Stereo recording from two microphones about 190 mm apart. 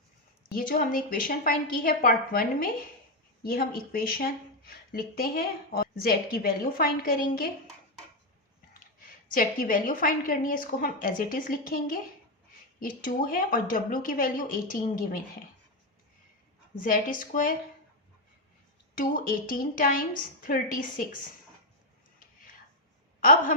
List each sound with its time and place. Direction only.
0.5 s speech: 50° left (ahead or behind)
9.0 s speech: 50° left (ahead or behind)
16.7 s speech: 45° left (ahead or behind)
18.9 s speech: 50° left (ahead or behind)
23.2 s speech: 45° left (ahead or behind)